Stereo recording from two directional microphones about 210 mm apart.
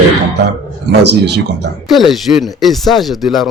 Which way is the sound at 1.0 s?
55° right (ahead or behind).